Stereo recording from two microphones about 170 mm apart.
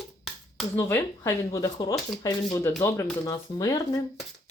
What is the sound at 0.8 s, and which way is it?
Speech, 15° left (ahead or behind).